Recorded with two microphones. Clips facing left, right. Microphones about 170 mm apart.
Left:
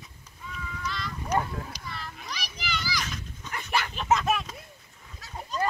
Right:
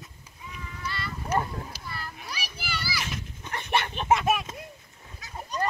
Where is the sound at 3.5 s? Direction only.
25° right (ahead or behind).